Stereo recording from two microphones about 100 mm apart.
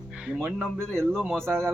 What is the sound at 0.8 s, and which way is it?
Speech, 5° left (ahead or behind).